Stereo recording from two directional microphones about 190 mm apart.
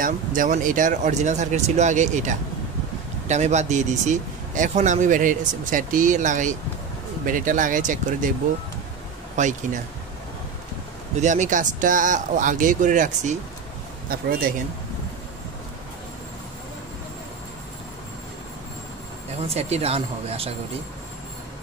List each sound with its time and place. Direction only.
0.0 s speech: 45° right (ahead or behind)
9.4 s speech: 40° right (ahead or behind)
11.1 s speech: 40° right (ahead or behind)
19.4 s speech: 30° right (ahead or behind)